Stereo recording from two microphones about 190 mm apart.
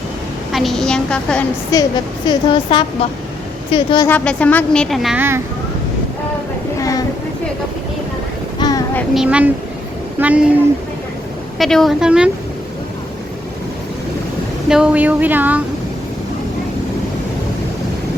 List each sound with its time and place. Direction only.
0.5 s a woman's voice: centre (ahead or behind)
1.7 s a woman's voice: 15° left (ahead or behind)
4.1 s a woman's voice: 10° left (ahead or behind); by 5.4 s 10° right (ahead or behind)
8.5 s child singing: 20° left (ahead or behind)
9.1 s a woman's voice: 5° right (ahead or behind)
11.5 s a woman's voice: centre (ahead or behind)
14.7 s speech: 5° right (ahead or behind)